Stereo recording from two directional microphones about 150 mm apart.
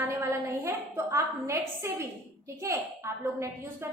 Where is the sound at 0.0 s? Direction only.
15° right (ahead or behind).